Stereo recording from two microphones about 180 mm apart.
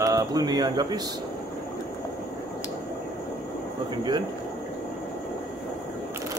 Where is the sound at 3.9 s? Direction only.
25° right (ahead or behind).